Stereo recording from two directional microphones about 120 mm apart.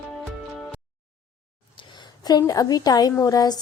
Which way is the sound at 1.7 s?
40° left (ahead or behind).